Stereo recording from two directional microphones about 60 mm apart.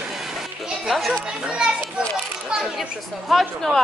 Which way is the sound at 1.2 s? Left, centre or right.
Centre.